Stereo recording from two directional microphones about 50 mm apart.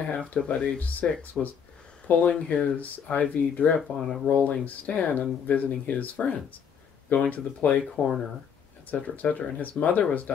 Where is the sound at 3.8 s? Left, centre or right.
Centre.